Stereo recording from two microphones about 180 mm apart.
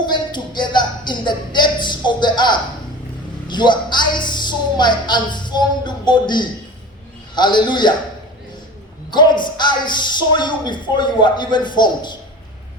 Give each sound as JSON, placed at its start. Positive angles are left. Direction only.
{"t": 0.0, "sound": "a sound", "side_deg": 25}
{"t": 7.3, "sound": "speech", "side_deg": 25}
{"t": 9.0, "sound": "speech", "side_deg": 25}